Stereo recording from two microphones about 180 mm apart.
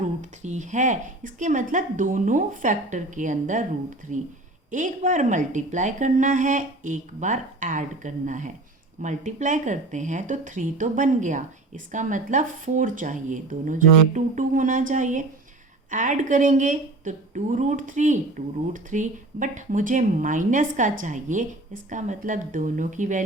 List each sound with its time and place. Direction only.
0.0 s a woman's voice: 40° right (ahead or behind)